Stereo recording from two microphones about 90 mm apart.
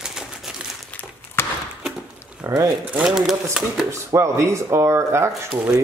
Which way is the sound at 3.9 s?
35° right (ahead or behind).